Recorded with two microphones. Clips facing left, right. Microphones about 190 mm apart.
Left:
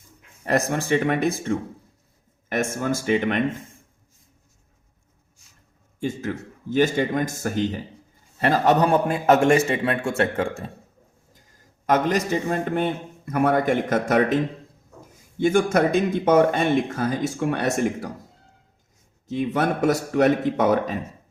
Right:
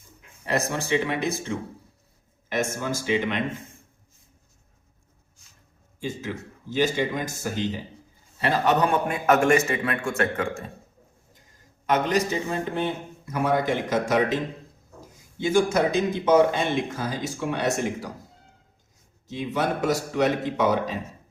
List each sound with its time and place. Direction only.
0.4 s a man's voice: 50° left (ahead or behind)
6.0 s a man's voice: 55° left (ahead or behind); by 10.6 s 30° left (ahead or behind)
11.9 s a man's voice: 45° left (ahead or behind)
15.4 s speech: 55° left (ahead or behind)
19.3 s a man's voice: 55° left (ahead or behind)